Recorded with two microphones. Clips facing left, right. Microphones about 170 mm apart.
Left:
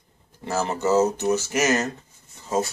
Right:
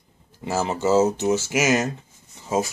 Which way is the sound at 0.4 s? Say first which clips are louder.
Right 1 dB; 10° right (ahead or behind).